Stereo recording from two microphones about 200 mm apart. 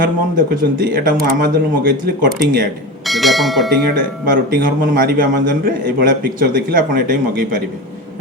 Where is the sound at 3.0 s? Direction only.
Centre (ahead or behind).